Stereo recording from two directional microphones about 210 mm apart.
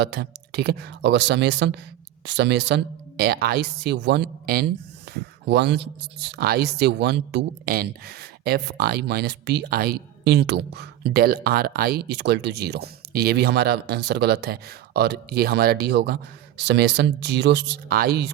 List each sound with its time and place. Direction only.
0.0 s speech: 50° right (ahead or behind)